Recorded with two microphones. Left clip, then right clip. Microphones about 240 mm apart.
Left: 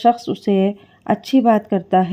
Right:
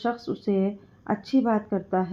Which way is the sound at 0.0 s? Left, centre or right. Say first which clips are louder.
Left 12 dB; left.